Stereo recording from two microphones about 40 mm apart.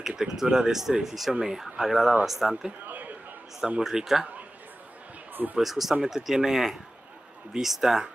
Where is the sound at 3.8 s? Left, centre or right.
Centre.